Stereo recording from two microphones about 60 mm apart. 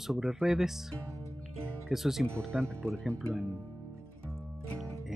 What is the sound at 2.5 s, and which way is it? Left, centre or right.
Speech, centre.